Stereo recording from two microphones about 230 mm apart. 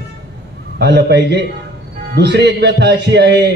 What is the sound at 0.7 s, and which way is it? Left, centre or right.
A man's voice, right.